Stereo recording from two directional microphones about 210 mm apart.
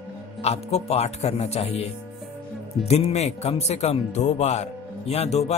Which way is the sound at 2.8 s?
30° left (ahead or behind).